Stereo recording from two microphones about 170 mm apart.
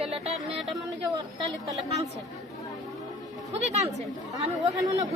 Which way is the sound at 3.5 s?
40° right (ahead or behind).